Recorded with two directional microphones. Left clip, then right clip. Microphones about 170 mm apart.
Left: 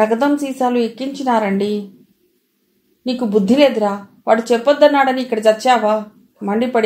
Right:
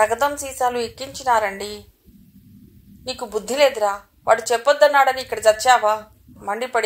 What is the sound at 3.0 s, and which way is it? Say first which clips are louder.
A woman's voice: left 9 dB; 35° right (ahead or behind).